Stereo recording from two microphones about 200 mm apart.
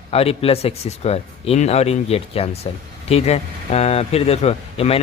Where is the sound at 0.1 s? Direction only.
30° left (ahead or behind).